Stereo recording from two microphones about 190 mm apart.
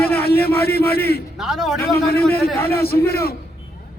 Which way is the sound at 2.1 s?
55° left (ahead or behind).